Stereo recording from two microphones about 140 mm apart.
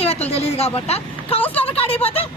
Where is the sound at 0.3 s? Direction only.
45° left (ahead or behind).